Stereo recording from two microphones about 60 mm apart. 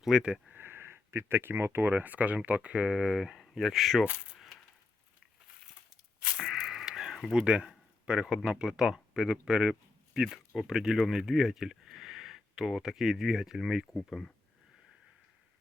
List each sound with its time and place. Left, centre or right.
0.0 s speech: centre
0.5 s a sound: right
1.9 s speech: right; by 4.0 s centre
4.0 s speech: right
6.3 s a sound: centre
7.4 s speech: centre